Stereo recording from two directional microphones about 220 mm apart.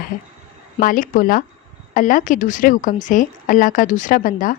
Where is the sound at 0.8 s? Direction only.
40° left (ahead or behind).